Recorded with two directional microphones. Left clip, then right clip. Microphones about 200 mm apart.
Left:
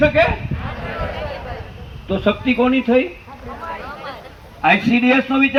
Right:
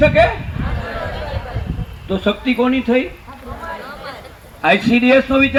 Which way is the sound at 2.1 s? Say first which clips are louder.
Even; 35° right (ahead or behind).